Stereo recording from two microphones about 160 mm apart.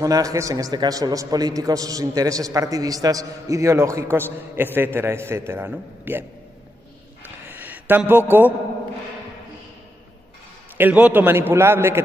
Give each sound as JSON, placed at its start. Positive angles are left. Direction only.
{"t": 0.0, "sound": "a man's voice", "side_deg": -20}
{"t": 7.4, "sound": "a sound", "side_deg": -10}
{"t": 10.8, "sound": "a man's voice", "side_deg": -10}